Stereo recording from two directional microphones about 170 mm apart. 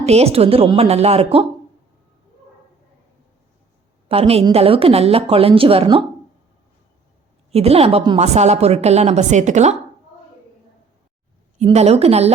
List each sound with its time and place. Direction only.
0.0 s a woman's voice: 40° right (ahead or behind)
4.1 s a woman's voice: 35° right (ahead or behind)
7.5 s a woman's voice: 35° right (ahead or behind)
11.5 s a woman's voice: 40° right (ahead or behind)